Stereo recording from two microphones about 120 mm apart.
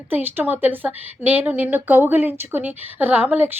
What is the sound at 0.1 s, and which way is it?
A woman's voice, 15° right (ahead or behind).